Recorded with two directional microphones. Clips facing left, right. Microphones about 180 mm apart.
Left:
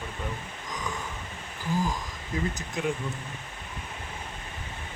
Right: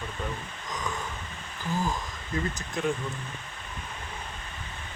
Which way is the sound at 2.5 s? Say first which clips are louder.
Right 1 dB; 20° left (ahead or behind).